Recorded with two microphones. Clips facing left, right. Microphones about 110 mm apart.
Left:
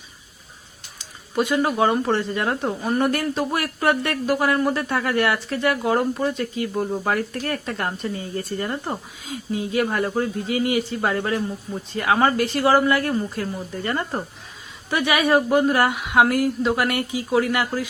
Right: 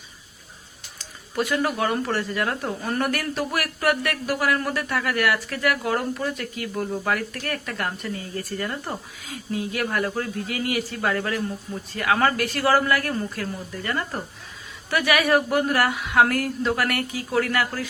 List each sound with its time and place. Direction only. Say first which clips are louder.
1.4 s speech: left 4 dB; 20° left (ahead or behind)